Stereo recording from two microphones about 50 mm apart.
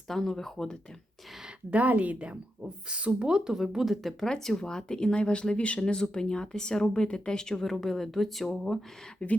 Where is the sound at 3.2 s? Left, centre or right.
Centre.